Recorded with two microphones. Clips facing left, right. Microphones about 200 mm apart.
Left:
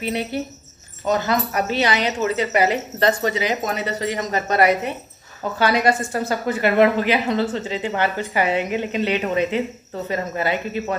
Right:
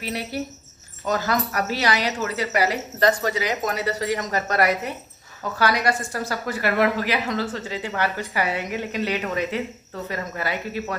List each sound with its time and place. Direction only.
0.0 s a woman's voice: 25° left (ahead or behind)